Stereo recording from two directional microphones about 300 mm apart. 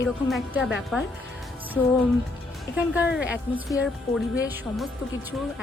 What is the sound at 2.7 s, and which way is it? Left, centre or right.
Speech, centre.